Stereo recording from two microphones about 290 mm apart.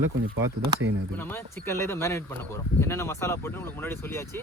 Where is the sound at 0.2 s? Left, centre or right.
Right.